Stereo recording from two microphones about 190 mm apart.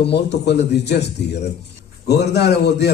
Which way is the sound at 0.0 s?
60° left (ahead or behind).